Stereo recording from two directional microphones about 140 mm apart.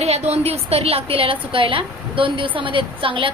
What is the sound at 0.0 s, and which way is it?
A woman's voice, 50° right (ahead or behind).